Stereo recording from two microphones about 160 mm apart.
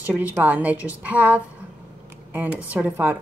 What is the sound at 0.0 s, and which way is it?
Speech, 10° right (ahead or behind).